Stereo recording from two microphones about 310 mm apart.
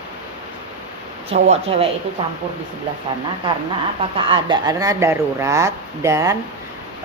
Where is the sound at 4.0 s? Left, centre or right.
Centre.